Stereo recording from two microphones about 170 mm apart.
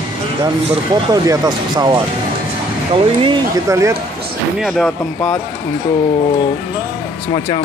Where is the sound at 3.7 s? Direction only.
15° right (ahead or behind).